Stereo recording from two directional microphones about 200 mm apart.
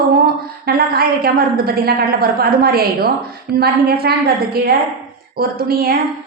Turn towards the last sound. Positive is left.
turn(degrees=-45)  # may be behind; listen again after turning